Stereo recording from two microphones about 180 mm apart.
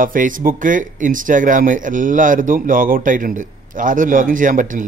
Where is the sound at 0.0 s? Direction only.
50° right (ahead or behind).